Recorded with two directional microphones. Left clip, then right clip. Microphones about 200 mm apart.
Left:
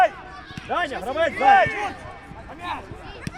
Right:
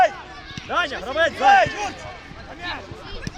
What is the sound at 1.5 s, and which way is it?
Speech, 50° right (ahead or behind).